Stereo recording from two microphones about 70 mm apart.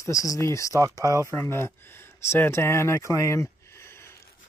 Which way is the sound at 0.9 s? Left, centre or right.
Left.